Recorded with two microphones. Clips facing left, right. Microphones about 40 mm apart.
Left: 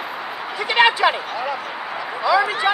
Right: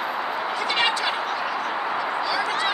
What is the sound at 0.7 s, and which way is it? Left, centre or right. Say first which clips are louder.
Speech: left 9 dB; left.